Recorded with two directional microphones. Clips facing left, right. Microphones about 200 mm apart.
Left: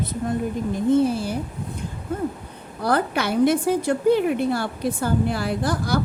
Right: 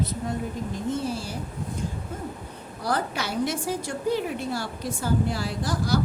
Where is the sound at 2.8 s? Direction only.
60° left (ahead or behind).